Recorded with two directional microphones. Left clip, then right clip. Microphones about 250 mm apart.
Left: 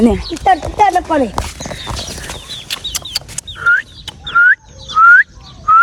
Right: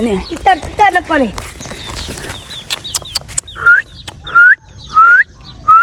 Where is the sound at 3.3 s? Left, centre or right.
Centre.